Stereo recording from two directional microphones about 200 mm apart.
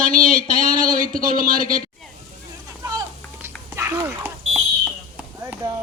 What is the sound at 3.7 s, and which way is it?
Dog, 15° right (ahead or behind).